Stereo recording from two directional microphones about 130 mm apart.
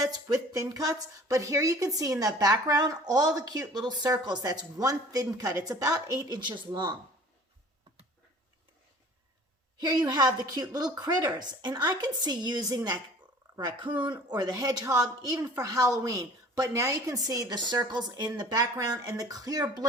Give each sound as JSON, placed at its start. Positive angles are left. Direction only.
{"t": 0.0, "sound": "speech", "side_deg": -30}
{"t": 9.8, "sound": "a woman's voice", "side_deg": -30}